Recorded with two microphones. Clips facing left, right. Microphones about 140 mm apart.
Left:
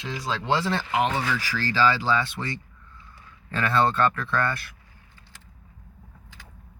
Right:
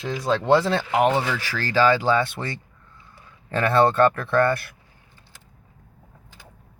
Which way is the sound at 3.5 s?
55° right (ahead or behind).